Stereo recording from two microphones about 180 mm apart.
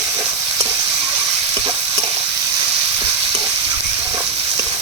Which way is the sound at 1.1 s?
20° right (ahead or behind).